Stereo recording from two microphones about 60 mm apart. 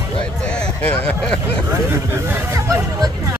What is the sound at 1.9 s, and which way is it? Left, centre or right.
Speech, right.